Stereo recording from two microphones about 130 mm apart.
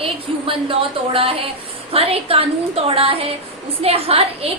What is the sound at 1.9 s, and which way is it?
A woman's voice, 50° right (ahead or behind).